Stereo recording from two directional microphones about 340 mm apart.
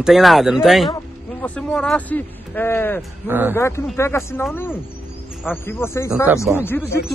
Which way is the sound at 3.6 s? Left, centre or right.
Centre.